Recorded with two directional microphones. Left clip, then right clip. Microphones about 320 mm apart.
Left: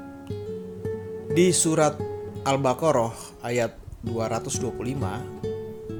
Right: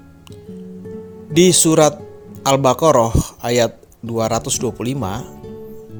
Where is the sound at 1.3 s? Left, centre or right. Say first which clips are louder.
Right 8 dB; right.